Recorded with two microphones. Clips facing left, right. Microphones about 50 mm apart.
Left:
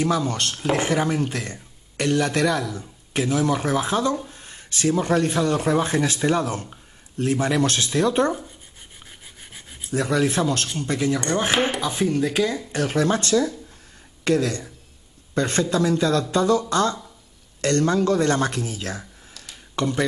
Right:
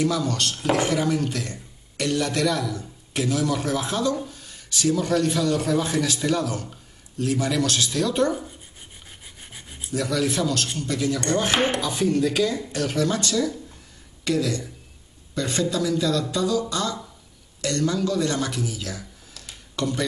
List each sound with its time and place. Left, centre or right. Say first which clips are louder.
0.0 s a man's voice: left 1 dB; left
9.4 s rub: right 1 dB; centre
9.9 s a man's voice: left 3 dB; left
19.7 s speech: left 3 dB; left